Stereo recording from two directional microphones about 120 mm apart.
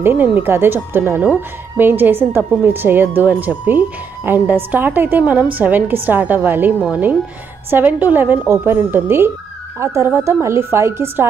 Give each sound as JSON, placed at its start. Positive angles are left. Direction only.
{"t": 0.0, "sound": "a woman's voice", "side_deg": -15}